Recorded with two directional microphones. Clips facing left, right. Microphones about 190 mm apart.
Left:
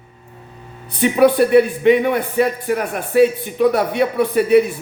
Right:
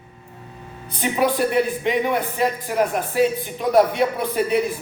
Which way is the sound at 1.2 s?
60° left (ahead or behind).